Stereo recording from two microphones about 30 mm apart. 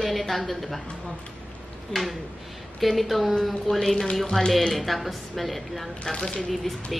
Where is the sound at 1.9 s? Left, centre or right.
Centre.